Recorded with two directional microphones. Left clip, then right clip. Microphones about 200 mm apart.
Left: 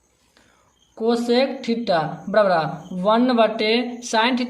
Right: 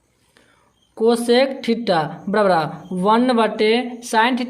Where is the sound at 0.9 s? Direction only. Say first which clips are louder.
Right 4 dB; 45° right (ahead or behind).